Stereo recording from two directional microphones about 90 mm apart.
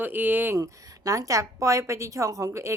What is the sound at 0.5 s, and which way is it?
A woman's voice, 40° right (ahead or behind).